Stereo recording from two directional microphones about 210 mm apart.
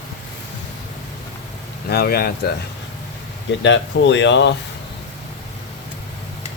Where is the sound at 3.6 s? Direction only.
60° left (ahead or behind).